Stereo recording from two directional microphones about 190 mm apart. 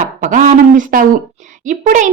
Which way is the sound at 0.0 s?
45° right (ahead or behind).